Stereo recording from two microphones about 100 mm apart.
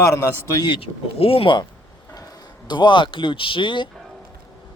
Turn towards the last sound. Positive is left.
turn(degrees=55)  # may be behind; listen again after turning